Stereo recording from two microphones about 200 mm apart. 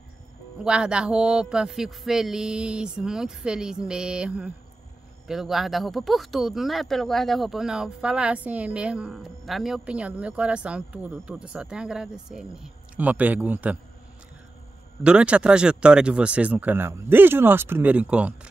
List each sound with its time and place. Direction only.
0.7 s speech: 5° right (ahead or behind)
15.0 s speech: 5° right (ahead or behind)